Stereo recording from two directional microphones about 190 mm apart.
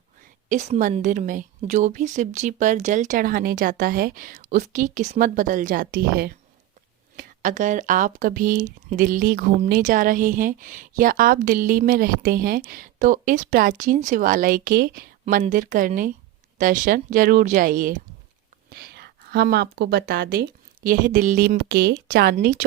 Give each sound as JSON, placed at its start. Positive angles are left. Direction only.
{"t": 0.4, "sound": "a woman's voice", "side_deg": -40}
{"t": 15.2, "sound": "a woman's voice", "side_deg": -40}
{"t": 18.7, "sound": "a woman's voice", "side_deg": -55}